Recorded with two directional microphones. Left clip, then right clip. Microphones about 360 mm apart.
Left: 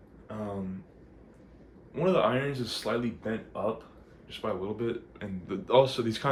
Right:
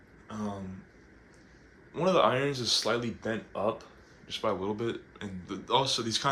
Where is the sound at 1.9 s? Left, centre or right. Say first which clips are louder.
Right 1 dB; centre.